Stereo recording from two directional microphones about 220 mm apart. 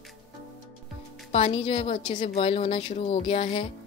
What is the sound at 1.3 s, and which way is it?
A woman's voice, 25° left (ahead or behind).